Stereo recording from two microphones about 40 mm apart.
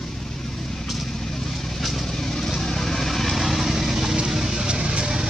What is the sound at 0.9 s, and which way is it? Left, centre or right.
Vehicle, centre.